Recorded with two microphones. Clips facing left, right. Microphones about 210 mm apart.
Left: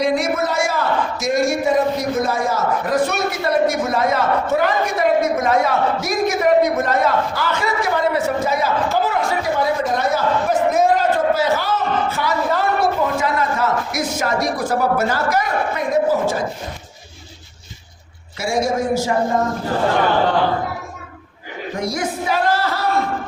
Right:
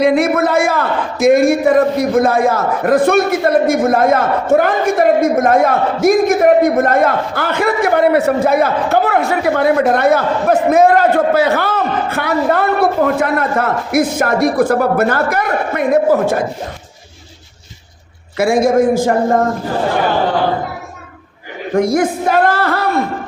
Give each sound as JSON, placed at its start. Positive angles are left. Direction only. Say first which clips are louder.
{"t": 0.0, "sound": "a man's voice", "louder": "right 6 dB", "side_deg": -60}
{"t": 18.3, "sound": "a man's voice", "louder": "right 8 dB", "side_deg": -55}
{"t": 21.8, "sound": "a man's voice", "louder": "right 10 dB", "side_deg": -50}